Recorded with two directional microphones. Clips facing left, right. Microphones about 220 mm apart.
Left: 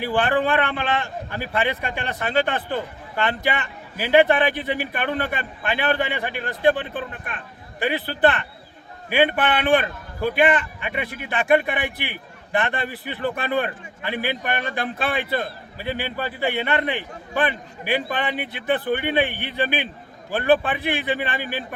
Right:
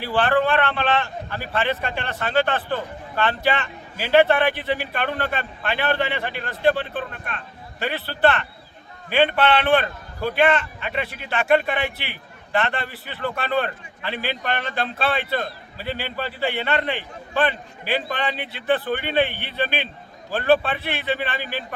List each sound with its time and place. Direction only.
0.0 s a man's voice: 20° left (ahead or behind)